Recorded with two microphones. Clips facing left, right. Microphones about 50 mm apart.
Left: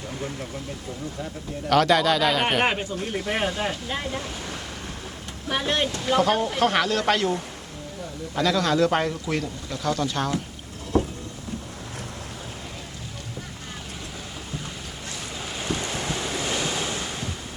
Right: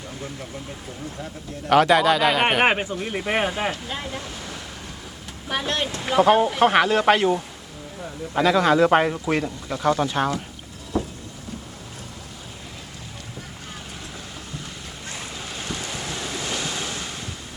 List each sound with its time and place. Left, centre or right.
1.7 s speech: centre
2.6 s speech: right
3.8 s speech: centre
5.9 s speech: centre
8.4 s speech: centre
10.9 s boat: centre
15.4 s waves: centre